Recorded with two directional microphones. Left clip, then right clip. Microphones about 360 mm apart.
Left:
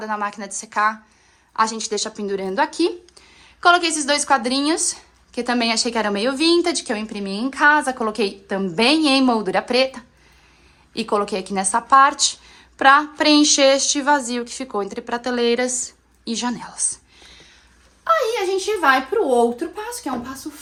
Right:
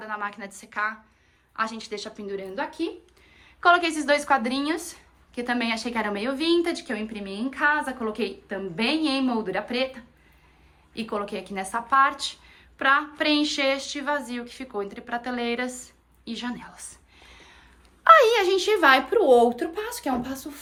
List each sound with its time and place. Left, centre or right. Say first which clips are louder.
0.0 s speech: left 7 dB; centre
3.4 s speech: left 4 dB; centre
18.4 s speech: left 1 dB; centre